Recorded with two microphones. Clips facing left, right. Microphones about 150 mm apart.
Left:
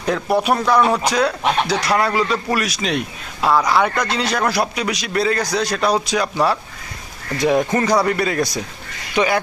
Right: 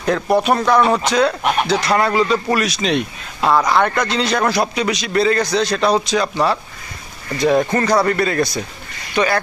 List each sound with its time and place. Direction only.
0.0 s a man's voice: 5° left (ahead or behind)